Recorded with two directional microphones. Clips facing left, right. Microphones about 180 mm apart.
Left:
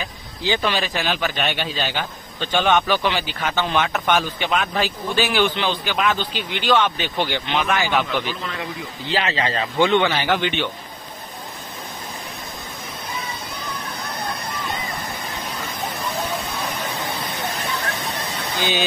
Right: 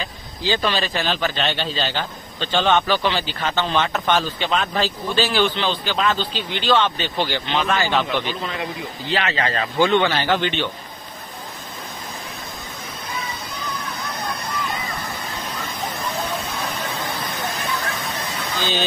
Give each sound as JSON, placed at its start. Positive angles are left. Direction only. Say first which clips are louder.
{"t": 0.0, "sound": "speech", "louder": "even", "side_deg": 15}
{"t": 9.1, "sound": "speech", "louder": "even", "side_deg": 30}
{"t": 10.1, "sound": "speech", "louder": "even", "side_deg": 15}
{"t": 15.4, "sound": "vehicle", "louder": "even", "side_deg": 0}
{"t": 17.1, "sound": "a sound", "louder": "even", "side_deg": 0}
{"t": 18.6, "sound": "speech", "louder": "left 1 dB", "side_deg": 15}